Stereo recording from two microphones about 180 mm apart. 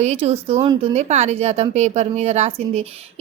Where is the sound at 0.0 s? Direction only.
35° right (ahead or behind).